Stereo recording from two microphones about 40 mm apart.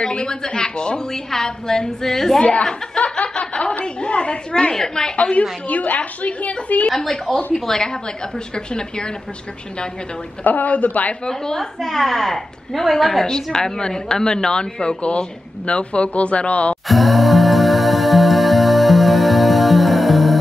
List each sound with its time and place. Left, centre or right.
0.0 s a woman's voice: left
2.4 s a woman's voice: left
3.0 s snicker: left
3.8 s a sound: left
4.7 s a woman's voice: centre
5.1 s a woman's voice: left
7.0 s a woman's voice: centre
10.4 s a woman's voice: left
11.2 s a woman's voice: centre
11.8 s a woman's voice: centre; by 16.7 s left
16.8 s music: centre